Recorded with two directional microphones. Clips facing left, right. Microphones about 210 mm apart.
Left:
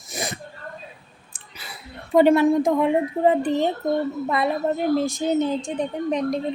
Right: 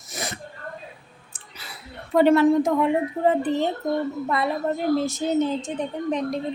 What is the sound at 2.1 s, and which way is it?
A woman's voice, 15° left (ahead or behind).